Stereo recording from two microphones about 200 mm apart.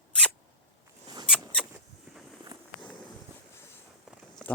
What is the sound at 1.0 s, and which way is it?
Rodents, 20° right (ahead or behind).